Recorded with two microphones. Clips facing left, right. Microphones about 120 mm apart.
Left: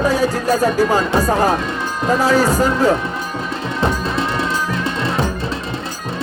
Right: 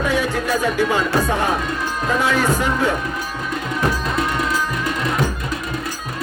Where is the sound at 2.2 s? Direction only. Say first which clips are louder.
Left 5 dB; 35° left (ahead or behind).